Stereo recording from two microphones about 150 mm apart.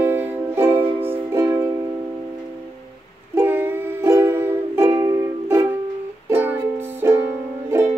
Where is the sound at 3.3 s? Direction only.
15° right (ahead or behind).